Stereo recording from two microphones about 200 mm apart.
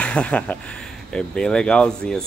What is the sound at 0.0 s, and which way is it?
Speech, 5° left (ahead or behind).